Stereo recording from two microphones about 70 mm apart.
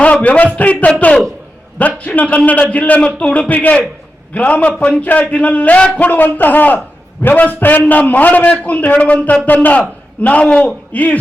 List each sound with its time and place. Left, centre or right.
0.0 s a man's voice: centre